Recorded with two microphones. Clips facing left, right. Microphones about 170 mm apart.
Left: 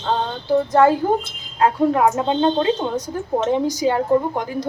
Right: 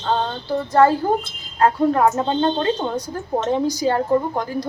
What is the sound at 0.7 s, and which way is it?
A woman's voice, 15° left (ahead or behind).